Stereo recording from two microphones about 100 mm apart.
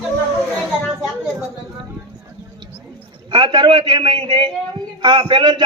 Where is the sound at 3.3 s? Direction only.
50° right (ahead or behind).